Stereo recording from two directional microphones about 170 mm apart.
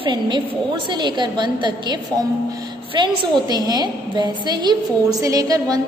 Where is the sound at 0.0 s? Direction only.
25° right (ahead or behind).